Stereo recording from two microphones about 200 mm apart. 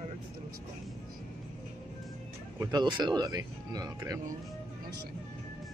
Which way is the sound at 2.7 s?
20° right (ahead or behind).